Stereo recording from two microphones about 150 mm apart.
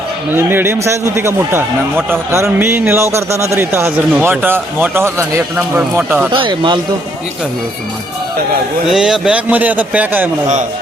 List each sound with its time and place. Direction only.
0.3 s a man's voice: 15° right (ahead or behind)
6.3 s speech: 35° right (ahead or behind)
8.9 s a man's voice: 5° right (ahead or behind)